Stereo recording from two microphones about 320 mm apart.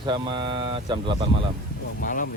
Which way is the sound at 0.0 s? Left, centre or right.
Centre.